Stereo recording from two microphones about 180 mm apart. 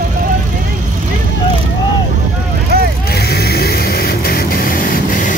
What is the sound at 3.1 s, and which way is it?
Vehicle, 60° left (ahead or behind).